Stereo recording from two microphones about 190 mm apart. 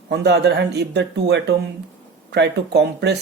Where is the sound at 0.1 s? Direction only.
60° right (ahead or behind).